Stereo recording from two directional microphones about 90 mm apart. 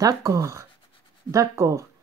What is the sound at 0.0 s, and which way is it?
A woman's voice, 35° right (ahead or behind).